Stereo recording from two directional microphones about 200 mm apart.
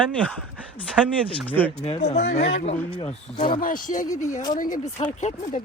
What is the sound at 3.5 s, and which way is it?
Speech, 45° left (ahead or behind).